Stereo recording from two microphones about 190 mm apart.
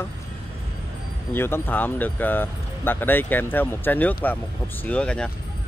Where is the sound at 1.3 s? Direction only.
10° left (ahead or behind).